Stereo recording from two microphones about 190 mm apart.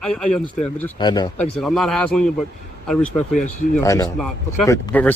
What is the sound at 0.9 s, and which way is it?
Speech, 20° left (ahead or behind).